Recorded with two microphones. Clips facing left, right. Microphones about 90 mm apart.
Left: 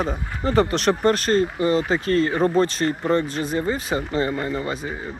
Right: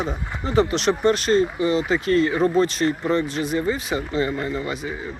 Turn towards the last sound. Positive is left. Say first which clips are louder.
# even
turn(degrees=40)  # may be behind; listen again after turning